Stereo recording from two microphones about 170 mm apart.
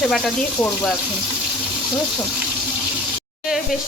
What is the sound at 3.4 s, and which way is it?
Sizzle, centre (ahead or behind).